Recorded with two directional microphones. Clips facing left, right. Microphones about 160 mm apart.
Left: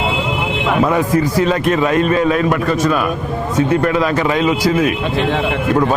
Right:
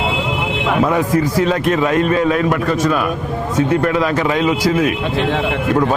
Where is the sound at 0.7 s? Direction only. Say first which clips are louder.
Left 1 dB; 20° left (ahead or behind).